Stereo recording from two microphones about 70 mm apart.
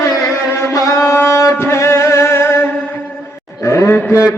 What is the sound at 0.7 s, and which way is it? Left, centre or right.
Shofar, left.